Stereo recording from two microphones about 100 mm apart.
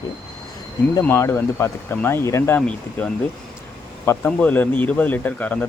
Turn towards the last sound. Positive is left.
turn(degrees=15)  # may be behind; listen again after turning